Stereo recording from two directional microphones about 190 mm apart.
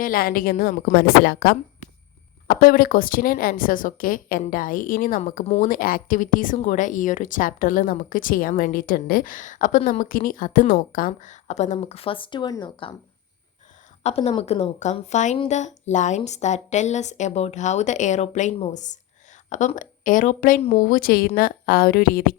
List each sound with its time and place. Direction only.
0.0 s speech: 50° left (ahead or behind); by 12.9 s 25° left (ahead or behind)
14.0 s a woman's voice: 35° left (ahead or behind); by 22.4 s 50° left (ahead or behind)